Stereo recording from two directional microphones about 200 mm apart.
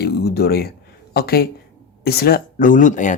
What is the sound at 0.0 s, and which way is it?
Speech, 55° left (ahead or behind).